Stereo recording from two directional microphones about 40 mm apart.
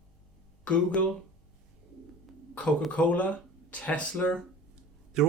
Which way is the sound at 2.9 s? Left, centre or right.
Left.